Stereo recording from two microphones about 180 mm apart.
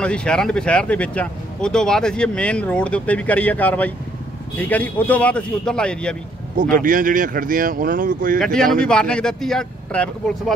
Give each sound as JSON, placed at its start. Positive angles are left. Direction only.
{"t": 0.0, "sound": "a man's voice", "side_deg": 5}
{"t": 6.5, "sound": "speech", "side_deg": -50}
{"t": 8.8, "sound": "speech", "side_deg": 5}